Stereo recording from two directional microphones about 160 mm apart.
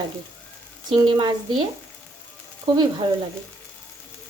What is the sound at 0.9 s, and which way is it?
Stir, 30° right (ahead or behind).